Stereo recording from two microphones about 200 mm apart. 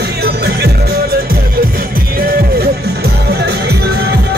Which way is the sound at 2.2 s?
50° right (ahead or behind).